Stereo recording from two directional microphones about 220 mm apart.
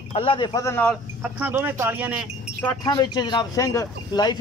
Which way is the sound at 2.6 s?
20° left (ahead or behind).